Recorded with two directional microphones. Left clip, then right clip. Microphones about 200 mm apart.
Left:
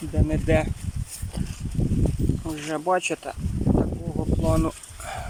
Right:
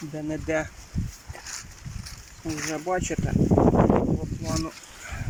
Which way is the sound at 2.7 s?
5° left (ahead or behind).